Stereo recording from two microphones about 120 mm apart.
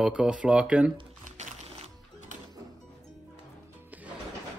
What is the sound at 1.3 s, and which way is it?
Music, 85° right.